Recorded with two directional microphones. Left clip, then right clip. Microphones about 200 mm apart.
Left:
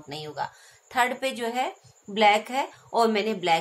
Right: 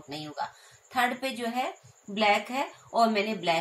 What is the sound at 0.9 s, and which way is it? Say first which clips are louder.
A woman's voice: left 3 dB; 45° left (ahead or behind).